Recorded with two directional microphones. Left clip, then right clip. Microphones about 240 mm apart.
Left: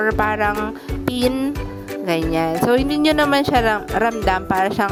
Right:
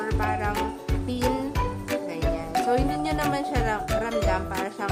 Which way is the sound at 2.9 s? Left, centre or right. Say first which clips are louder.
Left 10 dB; left.